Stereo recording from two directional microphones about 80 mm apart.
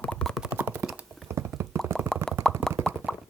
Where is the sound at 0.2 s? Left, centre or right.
Centre.